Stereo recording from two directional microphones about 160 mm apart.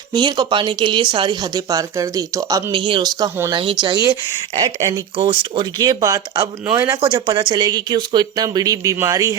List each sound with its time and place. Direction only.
0.1 s speech: 25° right (ahead or behind)
2.7 s speech: 30° right (ahead or behind)